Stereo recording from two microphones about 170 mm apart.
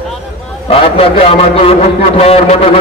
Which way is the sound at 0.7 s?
35° left (ahead or behind).